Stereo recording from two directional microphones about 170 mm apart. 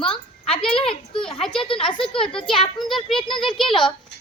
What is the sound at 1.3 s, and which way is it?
A child's voice, 30° left (ahead or behind).